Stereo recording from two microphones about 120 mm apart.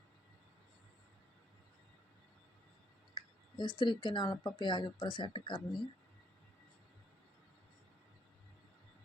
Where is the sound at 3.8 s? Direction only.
40° left (ahead or behind).